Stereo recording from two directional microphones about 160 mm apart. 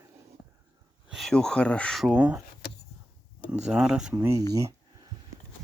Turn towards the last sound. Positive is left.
turn(degrees=-20)  # may be behind; listen again after turning